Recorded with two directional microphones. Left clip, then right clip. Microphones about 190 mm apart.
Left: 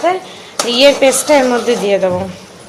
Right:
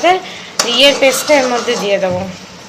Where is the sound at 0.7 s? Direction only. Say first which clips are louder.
Left 1 dB; 20° left (ahead or behind).